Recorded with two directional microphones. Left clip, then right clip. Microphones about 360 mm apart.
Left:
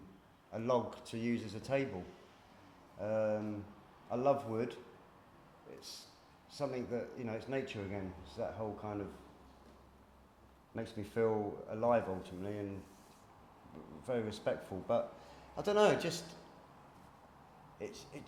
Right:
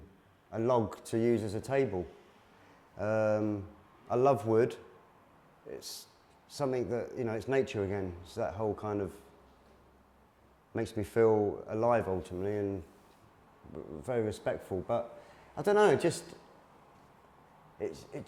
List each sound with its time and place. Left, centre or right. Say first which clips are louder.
0.5 s speech: right 5 dB; right
3.0 s speech: right 6 dB; right
6.5 s speech: right 6 dB; right
10.8 s speech: right 8 dB; right
14.0 s speech: right 4 dB; right
17.7 s speech: right 8 dB; right